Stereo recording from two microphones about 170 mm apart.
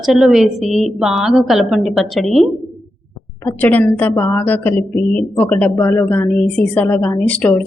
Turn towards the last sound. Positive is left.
turn(degrees=10)  # may be behind; listen again after turning